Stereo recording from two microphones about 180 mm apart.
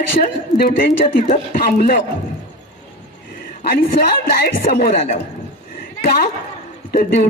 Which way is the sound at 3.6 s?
55° left (ahead or behind).